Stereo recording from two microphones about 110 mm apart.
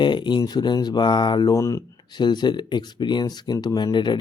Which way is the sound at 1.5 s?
25° left (ahead or behind).